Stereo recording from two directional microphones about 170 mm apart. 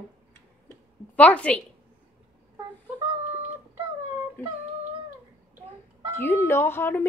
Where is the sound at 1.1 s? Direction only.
10° left (ahead or behind).